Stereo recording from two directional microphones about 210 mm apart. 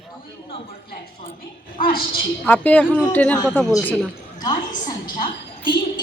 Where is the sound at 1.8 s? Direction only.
45° left (ahead or behind).